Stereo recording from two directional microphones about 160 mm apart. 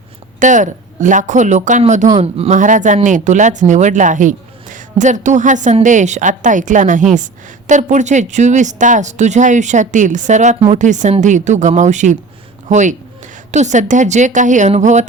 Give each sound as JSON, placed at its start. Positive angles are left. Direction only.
{"t": 0.3, "sound": "speech", "side_deg": -50}